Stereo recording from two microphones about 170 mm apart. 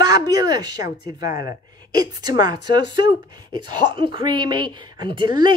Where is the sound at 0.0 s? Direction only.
25° right (ahead or behind).